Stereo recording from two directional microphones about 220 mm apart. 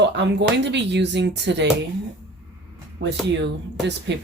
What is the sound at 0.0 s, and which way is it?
Speech, 55° right (ahead or behind).